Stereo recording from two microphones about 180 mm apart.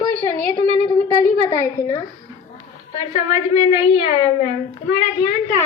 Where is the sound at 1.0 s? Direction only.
25° left (ahead or behind).